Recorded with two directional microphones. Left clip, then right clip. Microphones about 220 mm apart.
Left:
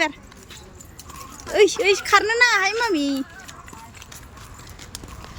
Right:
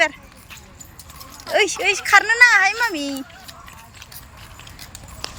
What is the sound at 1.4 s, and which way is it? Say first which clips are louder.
Speech: left 1 dB; centre (ahead or behind).